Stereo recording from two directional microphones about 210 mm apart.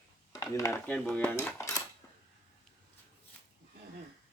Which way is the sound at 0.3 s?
15° left (ahead or behind).